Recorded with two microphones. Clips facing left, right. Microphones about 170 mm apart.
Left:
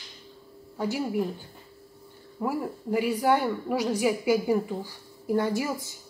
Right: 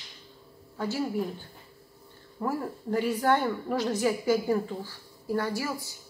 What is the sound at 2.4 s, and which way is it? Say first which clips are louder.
A woman's voice: left 2 dB; 10° left (ahead or behind).